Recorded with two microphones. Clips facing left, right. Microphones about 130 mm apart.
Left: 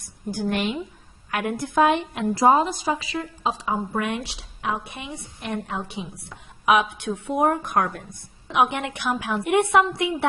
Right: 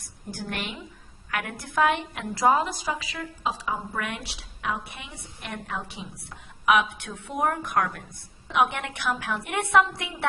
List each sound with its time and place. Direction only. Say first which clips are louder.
0.3 s a woman's voice: left 9 dB; 20° left (ahead or behind)